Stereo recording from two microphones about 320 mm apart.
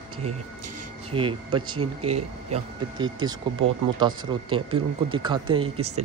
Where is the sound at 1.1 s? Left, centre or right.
Centre.